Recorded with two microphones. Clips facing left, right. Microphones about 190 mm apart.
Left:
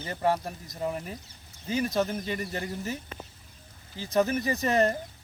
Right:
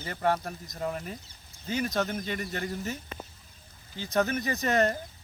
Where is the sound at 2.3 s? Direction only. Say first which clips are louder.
Even; 30° left (ahead or behind).